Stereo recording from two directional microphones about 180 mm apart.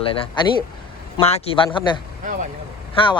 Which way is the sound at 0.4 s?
25° left (ahead or behind).